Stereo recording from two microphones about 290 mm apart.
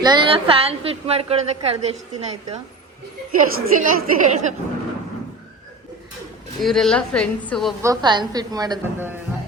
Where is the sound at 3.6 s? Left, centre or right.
Right.